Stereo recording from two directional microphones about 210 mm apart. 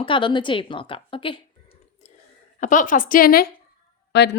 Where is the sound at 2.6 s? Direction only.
40° left (ahead or behind); by 4.3 s 55° left (ahead or behind).